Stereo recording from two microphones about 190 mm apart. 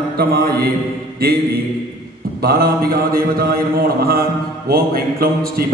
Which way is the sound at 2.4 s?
55° right (ahead or behind).